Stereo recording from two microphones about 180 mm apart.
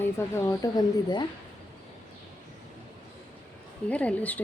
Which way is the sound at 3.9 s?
5° left (ahead or behind).